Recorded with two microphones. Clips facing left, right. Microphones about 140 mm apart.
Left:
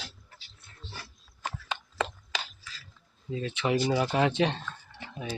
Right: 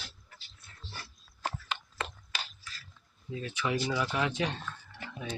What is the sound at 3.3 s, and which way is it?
Speech, 25° left (ahead or behind).